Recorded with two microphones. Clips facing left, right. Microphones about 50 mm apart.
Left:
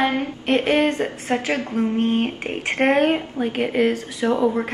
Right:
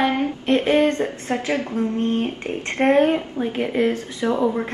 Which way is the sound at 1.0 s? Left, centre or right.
Left.